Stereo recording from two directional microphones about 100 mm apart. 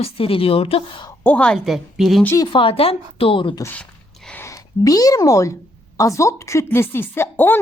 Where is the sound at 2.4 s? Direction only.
55° left (ahead or behind).